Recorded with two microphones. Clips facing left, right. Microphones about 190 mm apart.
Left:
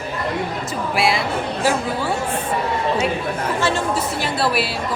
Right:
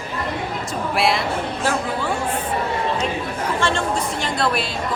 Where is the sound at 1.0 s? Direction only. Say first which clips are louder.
Even; centre (ahead or behind).